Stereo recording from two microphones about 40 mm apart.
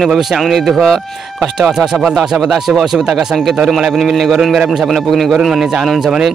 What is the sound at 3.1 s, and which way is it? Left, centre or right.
A man's voice, centre.